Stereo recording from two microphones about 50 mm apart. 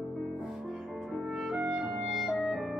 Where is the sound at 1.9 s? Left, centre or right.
Centre.